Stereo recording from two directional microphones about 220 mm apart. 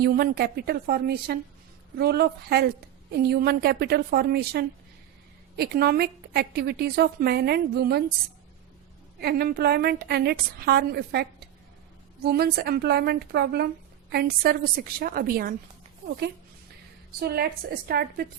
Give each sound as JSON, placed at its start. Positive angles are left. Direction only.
{"t": 0.0, "sound": "a woman's voice", "side_deg": -45}
{"t": 9.2, "sound": "a woman's voice", "side_deg": -45}
{"t": 17.2, "sound": "a woman's voice", "side_deg": -45}